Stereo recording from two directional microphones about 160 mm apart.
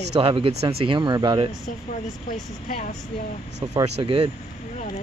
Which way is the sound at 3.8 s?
40° right (ahead or behind).